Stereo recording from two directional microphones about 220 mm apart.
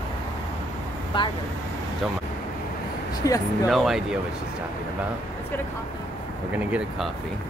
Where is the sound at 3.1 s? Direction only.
15° left (ahead or behind).